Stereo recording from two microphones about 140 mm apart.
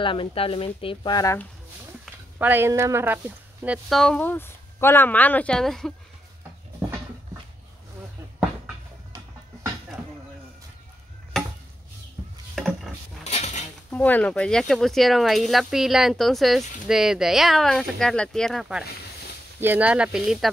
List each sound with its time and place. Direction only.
0.0 s speech: 40° left (ahead or behind)
1.1 s speech: 20° left (ahead or behind)
2.3 s a woman's voice: 15° right (ahead or behind)
3.9 s speech: 5° left (ahead or behind)
11.3 s stir: 5° left (ahead or behind)
12.5 s wood: centre (ahead or behind)
13.2 s a sound: 50° left (ahead or behind)
13.8 s a woman's voice: 10° left (ahead or behind); by 20.4 s 5° right (ahead or behind)